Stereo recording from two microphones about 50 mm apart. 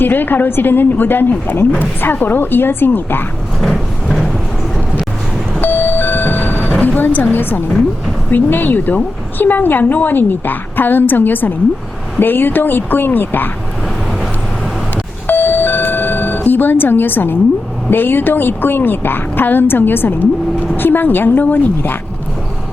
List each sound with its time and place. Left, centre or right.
0.0 s a woman's voice: left
3.6 s a sound: centre
5.5 s a sound: left
6.8 s a woman's voice: left
15.3 s doorbell: left
17.9 s a woman's voice: left